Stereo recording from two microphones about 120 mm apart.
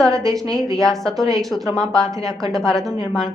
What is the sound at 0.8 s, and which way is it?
A woman's voice, 5° left (ahead or behind).